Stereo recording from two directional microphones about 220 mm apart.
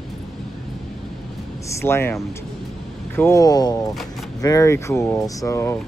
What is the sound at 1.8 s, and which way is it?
Speech, 10° left (ahead or behind).